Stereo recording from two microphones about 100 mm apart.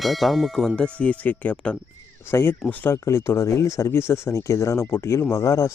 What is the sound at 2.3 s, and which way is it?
Speech, 25° left (ahead or behind).